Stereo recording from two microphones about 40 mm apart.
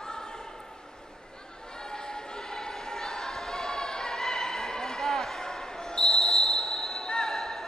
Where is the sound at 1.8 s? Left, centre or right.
Centre.